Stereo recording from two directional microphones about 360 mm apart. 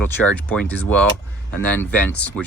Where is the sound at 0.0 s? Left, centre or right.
Centre.